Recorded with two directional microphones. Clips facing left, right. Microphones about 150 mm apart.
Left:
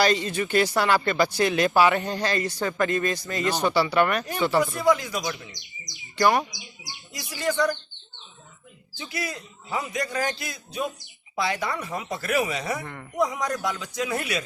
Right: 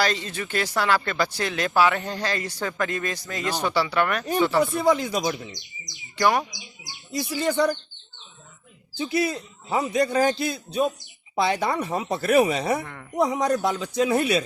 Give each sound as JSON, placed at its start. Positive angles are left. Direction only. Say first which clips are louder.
{"t": 0.0, "sound": "speech", "louder": "left 3 dB", "side_deg": 5}
{"t": 4.6, "sound": "a man's voice", "louder": "right 1 dB", "side_deg": -30}
{"t": 6.1, "sound": "speech", "louder": "left 1 dB", "side_deg": 5}
{"t": 7.1, "sound": "a man's voice", "louder": "right 3 dB", "side_deg": -30}
{"t": 9.0, "sound": "a man's voice", "louder": "right 9 dB", "side_deg": -25}
{"t": 12.8, "sound": "speech", "louder": "left 1 dB", "side_deg": 10}
{"t": 13.1, "sound": "a man's voice", "louder": "right 4 dB", "side_deg": -30}